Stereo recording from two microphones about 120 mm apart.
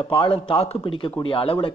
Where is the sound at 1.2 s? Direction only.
50° left (ahead or behind).